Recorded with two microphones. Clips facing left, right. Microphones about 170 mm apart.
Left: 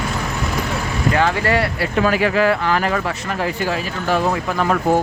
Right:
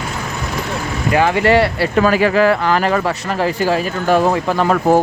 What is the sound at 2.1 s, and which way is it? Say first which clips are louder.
Speech: right 3 dB; 40° right (ahead or behind).